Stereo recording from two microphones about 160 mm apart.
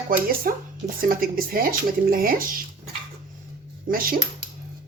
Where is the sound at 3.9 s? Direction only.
65° right (ahead or behind).